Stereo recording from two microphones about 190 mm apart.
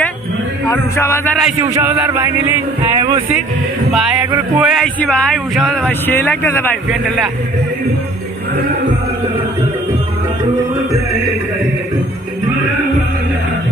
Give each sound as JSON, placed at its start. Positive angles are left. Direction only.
{"t": 0.7, "sound": "speech", "side_deg": 15}
{"t": 1.4, "sound": "music", "side_deg": -10}
{"t": 3.0, "sound": "speech", "side_deg": -25}
{"t": 4.6, "sound": "speech", "side_deg": 0}